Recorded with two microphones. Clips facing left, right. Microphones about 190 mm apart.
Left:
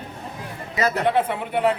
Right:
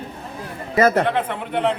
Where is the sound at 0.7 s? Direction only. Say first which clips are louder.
Right 7 dB; 50° right (ahead or behind).